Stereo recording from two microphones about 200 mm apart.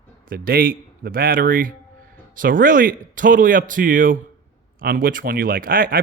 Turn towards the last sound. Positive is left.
turn(degrees=-45)  # may be behind; listen again after turning